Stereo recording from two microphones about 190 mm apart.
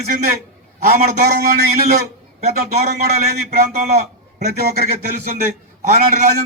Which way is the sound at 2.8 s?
55° right (ahead or behind).